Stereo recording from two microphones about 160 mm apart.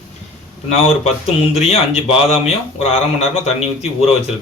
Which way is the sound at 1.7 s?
40° left (ahead or behind).